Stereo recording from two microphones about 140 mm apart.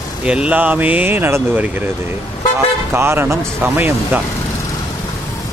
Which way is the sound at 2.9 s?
15° right (ahead or behind).